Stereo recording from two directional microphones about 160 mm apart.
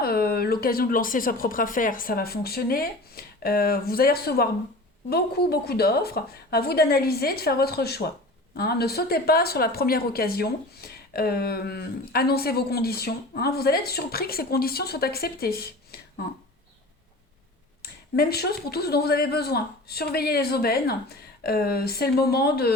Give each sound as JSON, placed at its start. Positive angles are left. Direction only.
{"t": 0.0, "sound": "a woman's voice", "side_deg": 70}
{"t": 17.8, "sound": "a sound", "side_deg": 75}
{"t": 18.2, "sound": "speech", "side_deg": 80}